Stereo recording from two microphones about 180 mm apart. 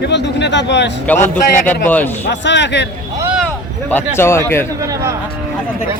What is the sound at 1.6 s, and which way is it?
Speech, 10° left (ahead or behind).